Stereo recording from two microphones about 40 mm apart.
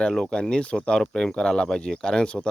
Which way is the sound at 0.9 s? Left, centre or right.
Centre.